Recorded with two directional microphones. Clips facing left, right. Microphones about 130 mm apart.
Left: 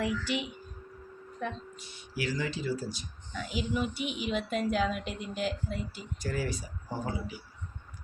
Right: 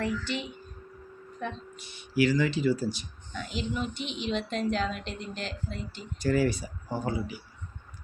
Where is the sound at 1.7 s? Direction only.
70° right (ahead or behind).